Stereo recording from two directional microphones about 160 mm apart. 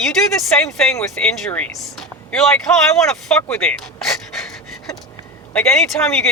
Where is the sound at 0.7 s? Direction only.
Centre (ahead or behind).